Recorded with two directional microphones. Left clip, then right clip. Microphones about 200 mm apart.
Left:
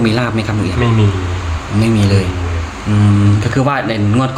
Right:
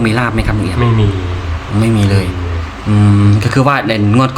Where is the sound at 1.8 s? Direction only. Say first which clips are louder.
Even; 10° right (ahead or behind).